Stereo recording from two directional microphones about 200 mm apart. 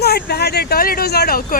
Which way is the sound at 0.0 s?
50° left (ahead or behind).